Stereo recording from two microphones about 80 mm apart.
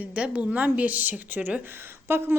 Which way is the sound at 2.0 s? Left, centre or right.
Right.